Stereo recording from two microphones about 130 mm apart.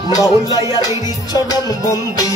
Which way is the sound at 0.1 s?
30° left (ahead or behind).